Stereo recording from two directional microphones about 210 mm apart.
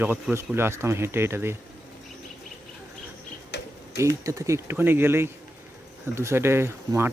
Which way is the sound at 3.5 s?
50° left (ahead or behind).